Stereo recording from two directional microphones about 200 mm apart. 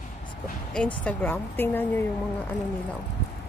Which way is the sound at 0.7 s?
5° left (ahead or behind).